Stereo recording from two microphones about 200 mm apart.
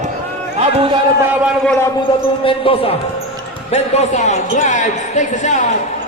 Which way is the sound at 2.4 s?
25° left (ahead or behind).